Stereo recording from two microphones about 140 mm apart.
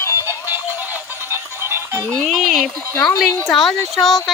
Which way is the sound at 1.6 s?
15° right (ahead or behind).